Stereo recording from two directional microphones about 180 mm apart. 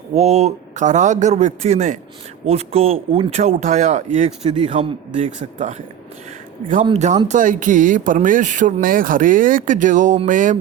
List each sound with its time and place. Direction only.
0.1 s speech: 35° right (ahead or behind)
6.8 s speech: 35° right (ahead or behind)